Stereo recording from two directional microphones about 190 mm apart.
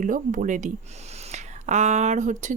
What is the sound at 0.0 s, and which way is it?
Speech, 45° right (ahead or behind).